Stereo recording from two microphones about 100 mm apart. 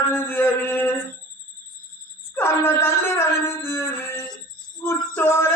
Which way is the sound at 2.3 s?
25° left (ahead or behind).